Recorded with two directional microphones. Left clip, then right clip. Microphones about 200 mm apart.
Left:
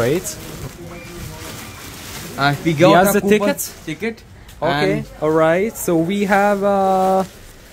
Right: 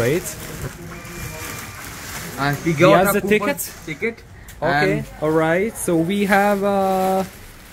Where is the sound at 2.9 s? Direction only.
15° left (ahead or behind).